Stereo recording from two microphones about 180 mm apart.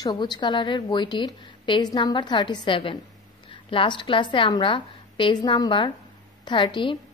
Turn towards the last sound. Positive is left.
turn(degrees=25)  # may be behind; listen again after turning